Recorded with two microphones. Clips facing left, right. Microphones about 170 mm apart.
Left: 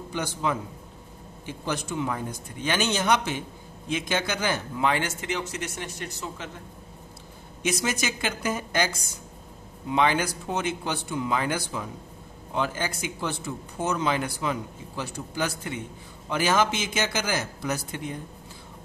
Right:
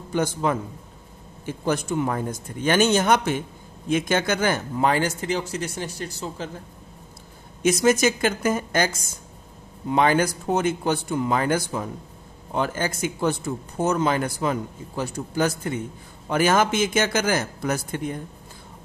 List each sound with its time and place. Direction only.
0.1 s speech: 50° right (ahead or behind)
7.6 s speech: 45° right (ahead or behind)